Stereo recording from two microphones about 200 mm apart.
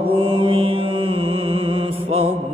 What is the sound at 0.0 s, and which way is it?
Mantra, 25° right (ahead or behind).